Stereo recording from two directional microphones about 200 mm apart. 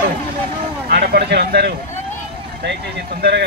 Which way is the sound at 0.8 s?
50° right (ahead or behind).